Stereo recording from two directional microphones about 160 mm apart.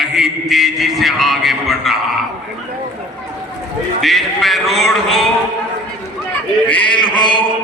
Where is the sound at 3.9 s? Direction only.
Centre (ahead or behind).